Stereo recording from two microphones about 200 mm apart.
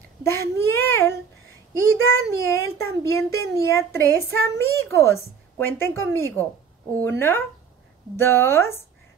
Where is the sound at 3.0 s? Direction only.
15° left (ahead or behind).